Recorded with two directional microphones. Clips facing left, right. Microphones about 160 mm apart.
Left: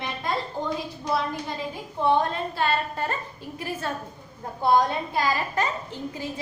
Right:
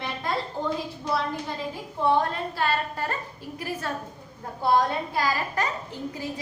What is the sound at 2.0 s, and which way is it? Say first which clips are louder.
A woman's voice: left 1 dB; 25° left (ahead or behind).